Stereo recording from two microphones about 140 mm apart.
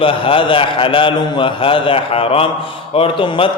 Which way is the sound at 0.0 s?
40° left (ahead or behind).